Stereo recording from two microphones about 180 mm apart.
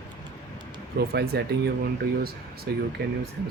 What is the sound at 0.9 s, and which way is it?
Speech, 60° right (ahead or behind).